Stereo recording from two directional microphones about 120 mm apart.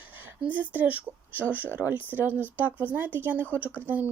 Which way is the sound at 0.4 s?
15° right (ahead or behind).